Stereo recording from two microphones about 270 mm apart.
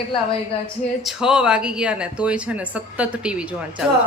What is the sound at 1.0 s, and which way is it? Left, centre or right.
Speech, centre.